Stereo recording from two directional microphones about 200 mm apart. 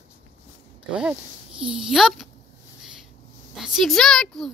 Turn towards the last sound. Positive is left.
turn(degrees=0)  # may be behind; listen again after turning